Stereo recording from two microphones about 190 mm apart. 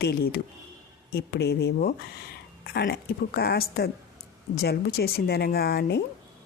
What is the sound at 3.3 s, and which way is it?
Speech, 55° left (ahead or behind).